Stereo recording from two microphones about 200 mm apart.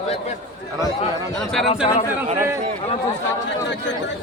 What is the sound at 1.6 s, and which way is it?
Speech, 30° left (ahead or behind).